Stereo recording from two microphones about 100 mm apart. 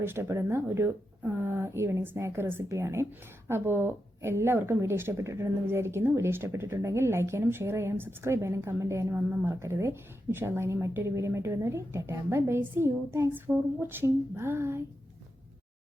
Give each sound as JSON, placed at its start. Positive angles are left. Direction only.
{"t": 0.0, "sound": "a woman's voice", "side_deg": -25}